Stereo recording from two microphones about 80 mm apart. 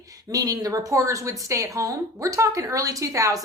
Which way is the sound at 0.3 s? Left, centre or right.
Right.